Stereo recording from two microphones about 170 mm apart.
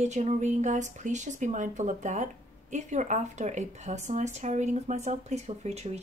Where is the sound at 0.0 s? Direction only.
45° right (ahead or behind).